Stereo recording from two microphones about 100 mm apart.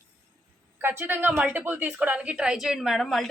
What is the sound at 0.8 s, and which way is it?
A woman's voice, 20° right (ahead or behind).